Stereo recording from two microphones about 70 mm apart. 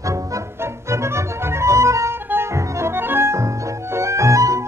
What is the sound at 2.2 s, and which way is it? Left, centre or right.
Music, right.